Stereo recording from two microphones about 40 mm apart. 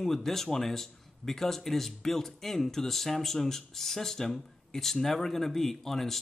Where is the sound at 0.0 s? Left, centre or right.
Centre.